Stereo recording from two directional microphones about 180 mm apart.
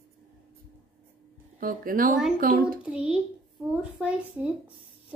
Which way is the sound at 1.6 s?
50° right (ahead or behind).